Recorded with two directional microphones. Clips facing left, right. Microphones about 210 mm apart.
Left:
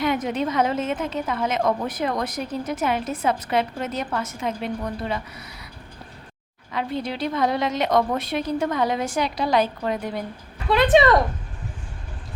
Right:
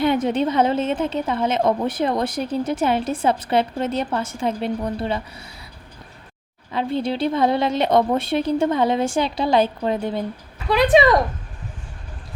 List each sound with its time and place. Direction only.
0.0 s a woman's voice: 30° right (ahead or behind)
6.7 s a woman's voice: 30° right (ahead or behind)
10.9 s speech: centre (ahead or behind)